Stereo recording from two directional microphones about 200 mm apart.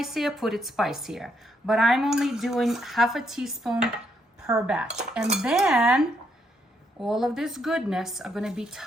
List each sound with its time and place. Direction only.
0.0 s a woman's voice: centre (ahead or behind)